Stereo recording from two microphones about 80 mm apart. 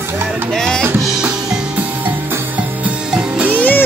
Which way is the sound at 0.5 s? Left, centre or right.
Centre.